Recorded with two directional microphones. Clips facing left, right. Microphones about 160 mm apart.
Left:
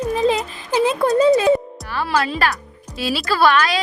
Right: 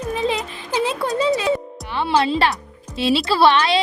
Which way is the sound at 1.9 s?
25° right (ahead or behind).